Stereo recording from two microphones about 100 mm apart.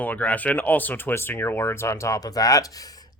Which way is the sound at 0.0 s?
15° left (ahead or behind).